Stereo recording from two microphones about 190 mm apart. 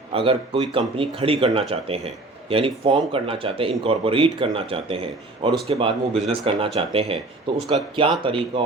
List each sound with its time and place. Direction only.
0.1 s a man's voice: 30° right (ahead or behind)